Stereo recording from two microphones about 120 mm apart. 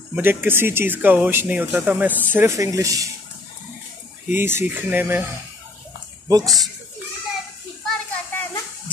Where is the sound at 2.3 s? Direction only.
25° right (ahead or behind).